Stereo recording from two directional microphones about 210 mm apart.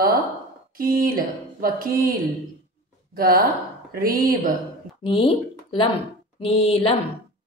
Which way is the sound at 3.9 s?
45° right (ahead or behind).